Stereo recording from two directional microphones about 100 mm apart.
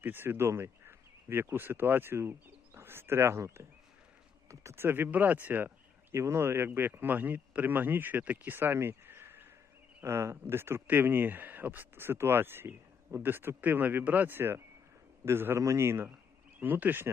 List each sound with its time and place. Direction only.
0.0 s speech: 20° right (ahead or behind)